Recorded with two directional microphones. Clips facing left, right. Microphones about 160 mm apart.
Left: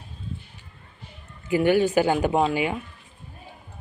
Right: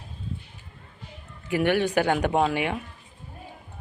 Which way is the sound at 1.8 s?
5° left (ahead or behind).